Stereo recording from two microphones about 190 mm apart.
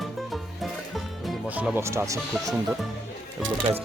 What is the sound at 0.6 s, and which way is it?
Music, centre (ahead or behind).